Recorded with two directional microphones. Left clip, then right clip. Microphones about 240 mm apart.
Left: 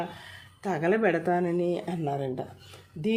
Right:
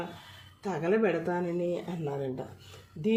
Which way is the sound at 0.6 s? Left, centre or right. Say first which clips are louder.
Left 3 dB; left.